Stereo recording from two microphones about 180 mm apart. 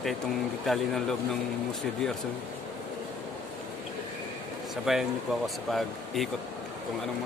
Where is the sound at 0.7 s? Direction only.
Centre (ahead or behind).